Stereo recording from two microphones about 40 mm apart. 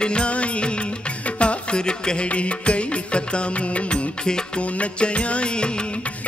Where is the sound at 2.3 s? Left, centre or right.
Left.